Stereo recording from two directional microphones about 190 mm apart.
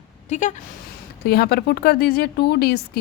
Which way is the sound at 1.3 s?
55° left (ahead or behind).